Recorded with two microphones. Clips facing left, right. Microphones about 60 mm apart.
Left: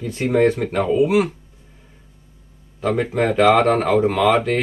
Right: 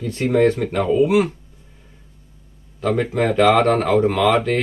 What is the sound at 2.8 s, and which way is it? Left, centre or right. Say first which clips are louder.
Speech: even; centre.